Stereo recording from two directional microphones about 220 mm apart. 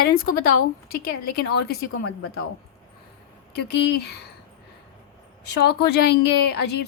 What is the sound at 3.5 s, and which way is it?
Speech, 50° left (ahead or behind).